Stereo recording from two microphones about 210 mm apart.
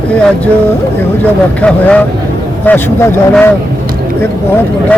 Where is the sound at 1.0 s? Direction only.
10° left (ahead or behind).